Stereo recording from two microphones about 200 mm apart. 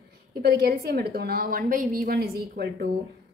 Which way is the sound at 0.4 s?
50° right (ahead or behind).